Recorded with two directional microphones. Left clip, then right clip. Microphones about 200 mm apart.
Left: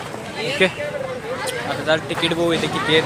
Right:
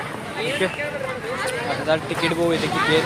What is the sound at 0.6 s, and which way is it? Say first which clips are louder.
Speech: left 8 dB; 45° left (ahead or behind).